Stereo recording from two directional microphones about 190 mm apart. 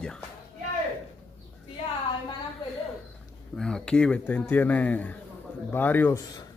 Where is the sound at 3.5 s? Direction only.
5° left (ahead or behind).